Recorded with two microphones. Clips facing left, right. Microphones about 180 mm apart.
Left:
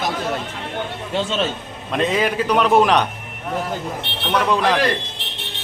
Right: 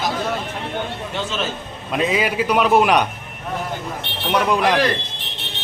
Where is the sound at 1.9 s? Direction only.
5° right (ahead or behind).